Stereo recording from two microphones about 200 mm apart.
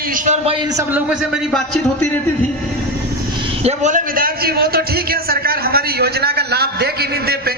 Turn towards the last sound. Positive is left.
turn(degrees=-50)  # may be behind; listen again after turning